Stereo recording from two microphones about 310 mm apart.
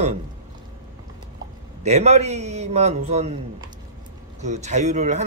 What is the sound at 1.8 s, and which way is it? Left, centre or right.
Speech, right.